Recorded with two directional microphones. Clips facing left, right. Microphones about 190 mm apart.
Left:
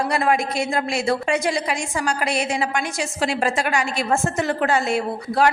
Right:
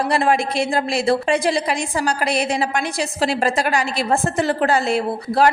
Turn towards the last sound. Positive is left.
turn(degrees=-35)  # may be behind; listen again after turning